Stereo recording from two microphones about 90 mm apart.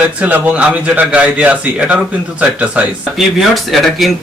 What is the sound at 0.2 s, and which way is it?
A man's voice, 15° right (ahead or behind).